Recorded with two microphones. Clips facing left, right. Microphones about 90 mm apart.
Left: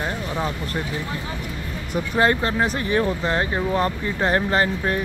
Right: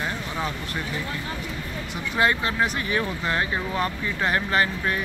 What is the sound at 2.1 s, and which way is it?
Speech, 35° left (ahead or behind).